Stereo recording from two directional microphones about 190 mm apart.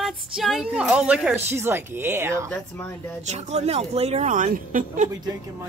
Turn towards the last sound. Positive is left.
turn(degrees=-45)  # may be behind; listen again after turning